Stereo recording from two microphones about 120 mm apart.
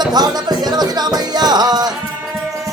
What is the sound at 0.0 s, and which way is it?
Music, 35° right (ahead or behind).